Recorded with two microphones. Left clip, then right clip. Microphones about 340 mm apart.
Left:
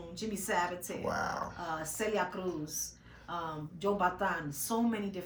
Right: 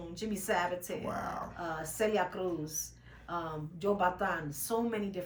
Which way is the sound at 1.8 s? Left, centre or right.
Centre.